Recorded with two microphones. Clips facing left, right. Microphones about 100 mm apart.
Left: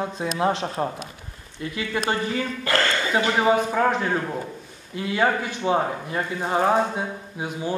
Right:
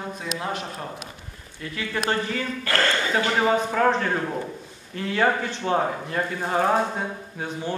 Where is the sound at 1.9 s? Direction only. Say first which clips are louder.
Left 1 dB; 15° left (ahead or behind).